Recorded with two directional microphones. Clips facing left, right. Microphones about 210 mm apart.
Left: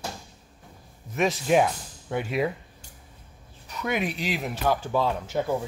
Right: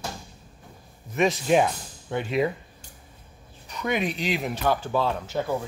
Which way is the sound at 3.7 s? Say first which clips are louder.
Right 1 dB; 5° left (ahead or behind).